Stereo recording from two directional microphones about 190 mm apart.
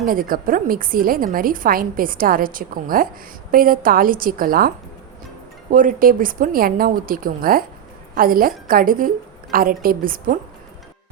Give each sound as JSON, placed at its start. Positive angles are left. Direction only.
{"t": 0.0, "sound": "a woman's voice", "side_deg": -50}
{"t": 5.7, "sound": "a woman's voice", "side_deg": -45}